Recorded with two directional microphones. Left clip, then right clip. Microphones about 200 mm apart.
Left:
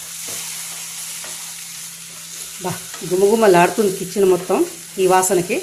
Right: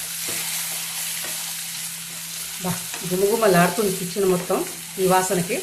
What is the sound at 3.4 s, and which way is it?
Speech, 40° left (ahead or behind).